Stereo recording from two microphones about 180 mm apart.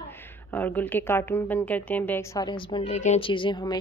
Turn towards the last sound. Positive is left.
turn(degrees=25)  # may be behind; listen again after turning